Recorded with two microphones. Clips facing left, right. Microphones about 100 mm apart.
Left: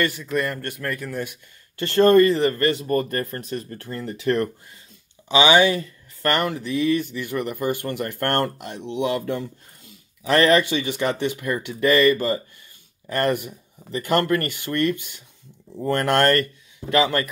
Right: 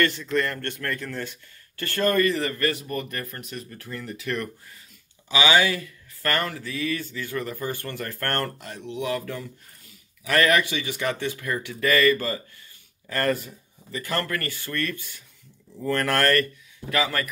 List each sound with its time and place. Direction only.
0.0 s speech: 10° left (ahead or behind)
1.9 s speech: 25° left (ahead or behind)